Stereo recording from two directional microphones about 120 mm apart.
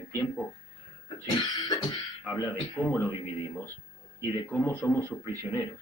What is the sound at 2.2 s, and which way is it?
Speech, 25° left (ahead or behind).